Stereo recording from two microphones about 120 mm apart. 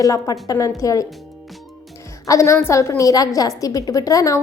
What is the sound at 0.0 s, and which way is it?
A woman's voice, 30° left (ahead or behind).